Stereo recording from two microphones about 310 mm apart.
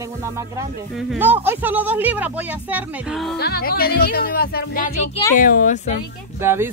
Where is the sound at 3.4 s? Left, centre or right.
Left.